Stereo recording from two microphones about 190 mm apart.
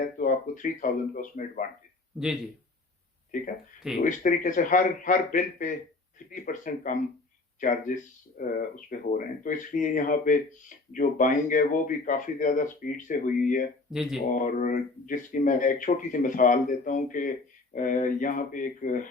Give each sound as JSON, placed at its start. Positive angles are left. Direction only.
{"t": 0.0, "sound": "speech", "side_deg": 45}
{"t": 2.1, "sound": "speech", "side_deg": -5}
{"t": 3.3, "sound": "speech", "side_deg": 45}
{"t": 13.9, "sound": "speech", "side_deg": -5}
{"t": 14.3, "sound": "speech", "side_deg": 45}